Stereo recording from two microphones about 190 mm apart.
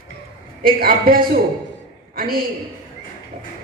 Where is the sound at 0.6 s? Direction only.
50° right (ahead or behind).